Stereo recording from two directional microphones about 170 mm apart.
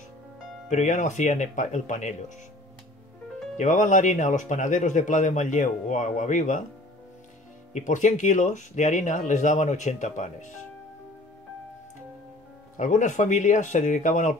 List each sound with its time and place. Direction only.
0.7 s speech: 45° left (ahead or behind)
3.5 s speech: 45° left (ahead or behind)
7.7 s speech: 45° left (ahead or behind)
12.7 s speech: 45° left (ahead or behind)